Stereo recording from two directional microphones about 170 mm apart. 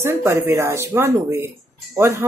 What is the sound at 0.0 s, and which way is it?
Speech, 15° right (ahead or behind).